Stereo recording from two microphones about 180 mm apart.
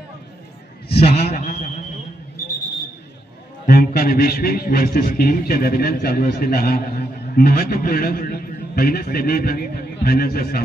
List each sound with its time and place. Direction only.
0.8 s a sound: 65° left (ahead or behind)
1.3 s a man's voice: 40° left (ahead or behind)
3.6 s a man's voice: 55° left (ahead or behind)